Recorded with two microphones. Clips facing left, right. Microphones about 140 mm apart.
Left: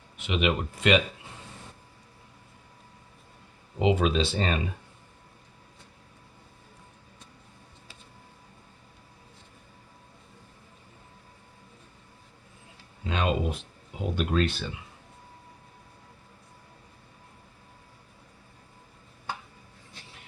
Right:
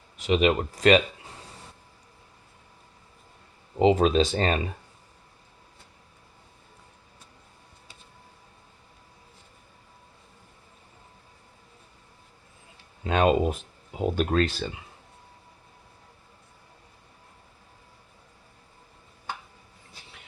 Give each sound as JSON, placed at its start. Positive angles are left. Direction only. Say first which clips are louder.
{"t": 0.2, "sound": "speech", "louder": "right 5 dB", "side_deg": -40}
{"t": 3.8, "sound": "speech", "louder": "right 4 dB", "side_deg": -35}
{"t": 13.1, "sound": "speech", "louder": "right 6 dB", "side_deg": -50}